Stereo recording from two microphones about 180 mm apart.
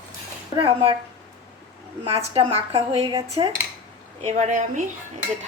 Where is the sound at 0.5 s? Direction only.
30° right (ahead or behind).